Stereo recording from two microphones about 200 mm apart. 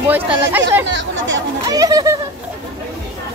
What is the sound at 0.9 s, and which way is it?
Speech, 70° right (ahead or behind).